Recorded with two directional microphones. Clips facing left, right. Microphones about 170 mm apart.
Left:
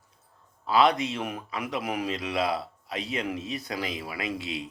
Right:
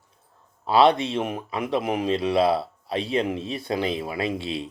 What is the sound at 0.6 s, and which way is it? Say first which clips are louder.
A man's voice: right 4 dB; 30° right (ahead or behind).